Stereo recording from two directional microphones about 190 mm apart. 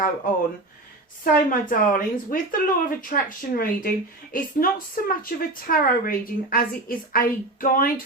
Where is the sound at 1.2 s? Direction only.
50° left (ahead or behind).